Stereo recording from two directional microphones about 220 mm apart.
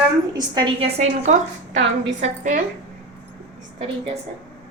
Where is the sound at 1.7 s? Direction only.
55° right (ahead or behind).